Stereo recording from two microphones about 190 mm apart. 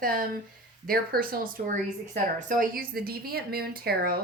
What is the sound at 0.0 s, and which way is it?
A woman's voice, 50° right (ahead or behind).